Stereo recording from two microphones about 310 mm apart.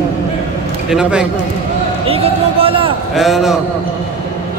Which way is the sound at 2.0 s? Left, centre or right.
Centre.